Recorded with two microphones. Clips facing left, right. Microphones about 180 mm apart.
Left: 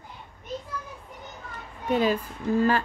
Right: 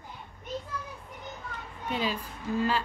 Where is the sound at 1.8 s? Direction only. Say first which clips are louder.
Left 8 dB; 50° left (ahead or behind).